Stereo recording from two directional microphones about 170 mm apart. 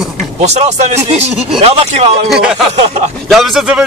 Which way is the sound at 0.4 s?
40° right (ahead or behind).